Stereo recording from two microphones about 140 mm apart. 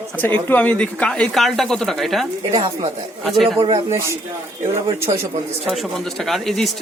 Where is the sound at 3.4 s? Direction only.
40° right (ahead or behind).